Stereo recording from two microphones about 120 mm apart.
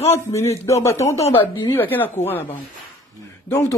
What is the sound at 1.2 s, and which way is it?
Speech, 45° left (ahead or behind).